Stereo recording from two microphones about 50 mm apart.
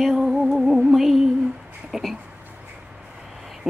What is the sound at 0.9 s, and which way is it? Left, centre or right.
Female singing, centre.